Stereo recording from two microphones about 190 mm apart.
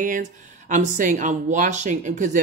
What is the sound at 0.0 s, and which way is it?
Speech, 45° right (ahead or behind).